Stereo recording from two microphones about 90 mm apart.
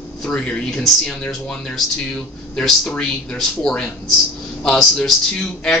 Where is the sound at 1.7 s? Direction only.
5° left (ahead or behind).